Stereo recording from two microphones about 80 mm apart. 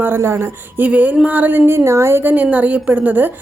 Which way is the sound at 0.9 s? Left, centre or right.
Centre.